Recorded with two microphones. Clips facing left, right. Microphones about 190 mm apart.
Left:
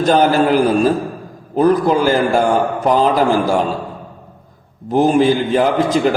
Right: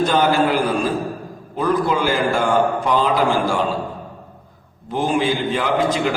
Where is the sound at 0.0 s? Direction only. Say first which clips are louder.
Left 4 dB; 45° left (ahead or behind).